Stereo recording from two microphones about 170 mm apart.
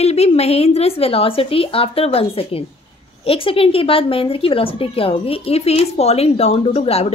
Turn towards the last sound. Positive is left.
turn(degrees=35)  # may be behind; listen again after turning